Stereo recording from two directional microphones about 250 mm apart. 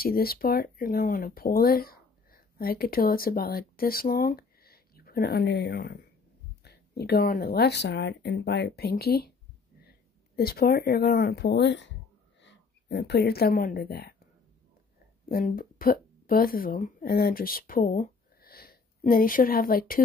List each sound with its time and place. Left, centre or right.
0.0 s speech: left
15.2 s a woman's voice: left